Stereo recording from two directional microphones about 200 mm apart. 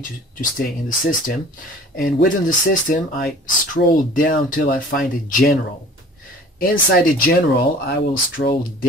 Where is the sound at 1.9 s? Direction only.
45° left (ahead or behind).